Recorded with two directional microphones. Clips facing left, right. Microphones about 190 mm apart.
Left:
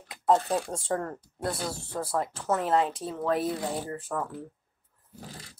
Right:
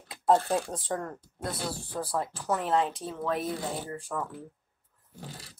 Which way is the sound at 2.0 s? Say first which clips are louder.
Left 2 dB; 25° left (ahead or behind).